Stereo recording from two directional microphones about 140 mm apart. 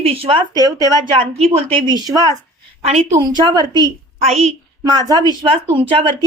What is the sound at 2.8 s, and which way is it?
Speech, 50° right (ahead or behind).